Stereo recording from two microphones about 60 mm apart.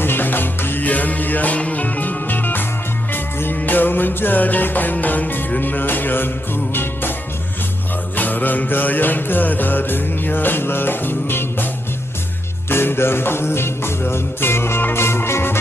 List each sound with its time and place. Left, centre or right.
0.0 s music: left
8.2 s music: left
12.6 s music: left